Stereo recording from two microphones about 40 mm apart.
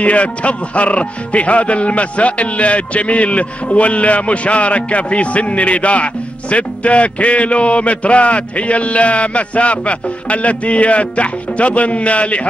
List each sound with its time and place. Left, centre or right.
0.0 s speech: left